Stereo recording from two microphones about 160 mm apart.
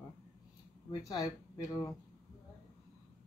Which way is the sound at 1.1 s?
25° left (ahead or behind).